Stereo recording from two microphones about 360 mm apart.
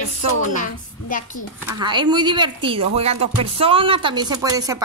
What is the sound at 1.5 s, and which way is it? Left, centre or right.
Speech, centre.